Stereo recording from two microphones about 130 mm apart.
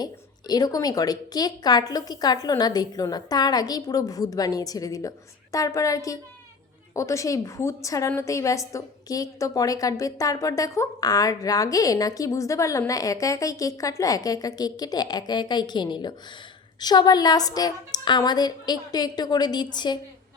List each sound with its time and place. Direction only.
0.0 s a woman's voice: 30° left (ahead or behind)